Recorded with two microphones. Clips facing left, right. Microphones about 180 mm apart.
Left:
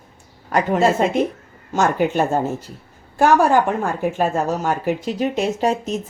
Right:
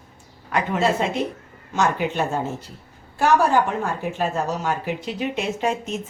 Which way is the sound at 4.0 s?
50° left (ahead or behind).